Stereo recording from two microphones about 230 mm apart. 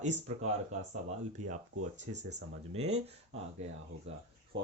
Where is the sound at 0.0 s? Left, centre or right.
Right.